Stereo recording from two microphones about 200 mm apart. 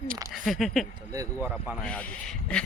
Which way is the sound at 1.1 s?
15° right (ahead or behind).